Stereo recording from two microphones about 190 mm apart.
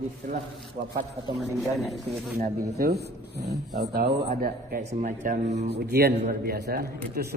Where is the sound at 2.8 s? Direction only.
60° right (ahead or behind); by 5.3 s 40° right (ahead or behind).